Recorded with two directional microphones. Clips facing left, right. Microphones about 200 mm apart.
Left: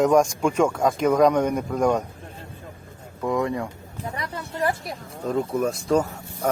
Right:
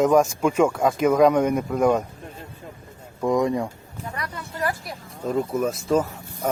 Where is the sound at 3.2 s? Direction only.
20° right (ahead or behind).